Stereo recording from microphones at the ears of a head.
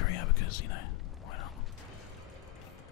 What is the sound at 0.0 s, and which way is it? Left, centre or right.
Whispering, left.